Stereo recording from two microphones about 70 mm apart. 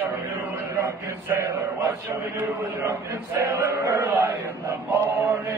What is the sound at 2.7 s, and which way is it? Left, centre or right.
Mantra, right.